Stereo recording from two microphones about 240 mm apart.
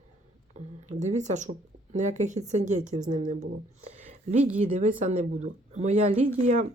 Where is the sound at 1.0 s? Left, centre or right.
Right.